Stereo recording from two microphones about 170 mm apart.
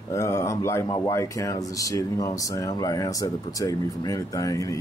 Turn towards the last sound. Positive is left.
turn(degrees=20)  # may be behind; listen again after turning